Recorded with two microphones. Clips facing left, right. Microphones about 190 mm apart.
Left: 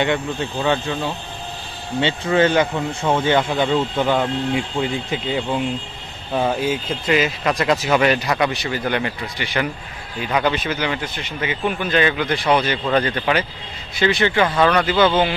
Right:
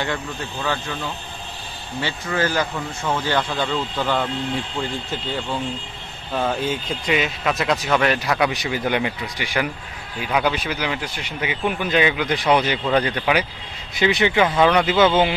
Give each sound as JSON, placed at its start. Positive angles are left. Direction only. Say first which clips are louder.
{"t": 0.0, "sound": "a man's voice", "louder": "left 6 dB", "side_deg": 20}
{"t": 8.5, "sound": "speech", "louder": "even", "side_deg": -15}